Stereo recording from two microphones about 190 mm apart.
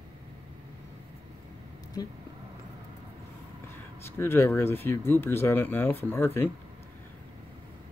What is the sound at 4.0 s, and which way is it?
Speech, 10° left (ahead or behind).